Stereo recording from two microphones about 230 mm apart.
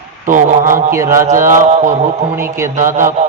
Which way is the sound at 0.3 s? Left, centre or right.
Right.